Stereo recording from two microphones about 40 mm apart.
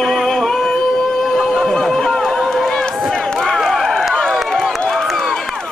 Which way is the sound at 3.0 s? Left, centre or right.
Centre.